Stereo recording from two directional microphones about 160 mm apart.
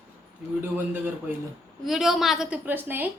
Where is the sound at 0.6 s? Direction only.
10° right (ahead or behind).